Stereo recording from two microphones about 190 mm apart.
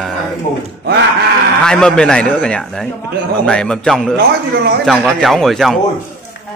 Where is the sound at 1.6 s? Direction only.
5° left (ahead or behind).